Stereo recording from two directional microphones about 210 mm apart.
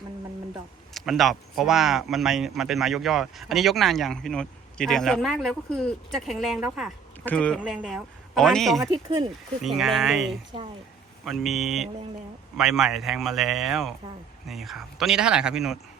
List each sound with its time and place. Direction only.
0.9 s speech: centre (ahead or behind)
8.8 s speech: 20° right (ahead or behind)
9.6 s speech: centre (ahead or behind)
10.5 s speech: 25° right (ahead or behind)
11.3 s speech: centre (ahead or behind)